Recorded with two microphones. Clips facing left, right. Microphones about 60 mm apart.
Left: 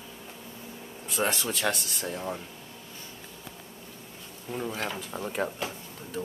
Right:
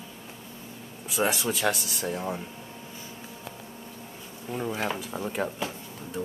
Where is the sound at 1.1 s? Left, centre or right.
Centre.